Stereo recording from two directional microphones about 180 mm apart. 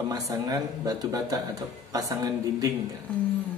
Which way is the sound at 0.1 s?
20° right (ahead or behind).